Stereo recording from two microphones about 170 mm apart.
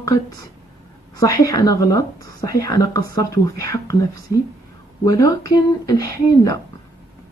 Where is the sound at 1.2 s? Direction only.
20° left (ahead or behind).